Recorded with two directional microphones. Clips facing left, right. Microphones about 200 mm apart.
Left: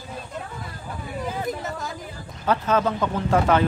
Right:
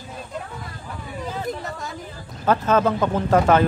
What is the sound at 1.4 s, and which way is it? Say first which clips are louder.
Chatter: even; centre (ahead or behind).